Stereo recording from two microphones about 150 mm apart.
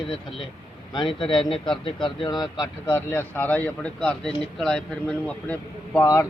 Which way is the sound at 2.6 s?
20° left (ahead or behind).